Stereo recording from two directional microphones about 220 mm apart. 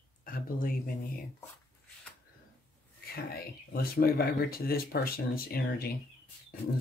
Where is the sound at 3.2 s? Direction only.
40° left (ahead or behind).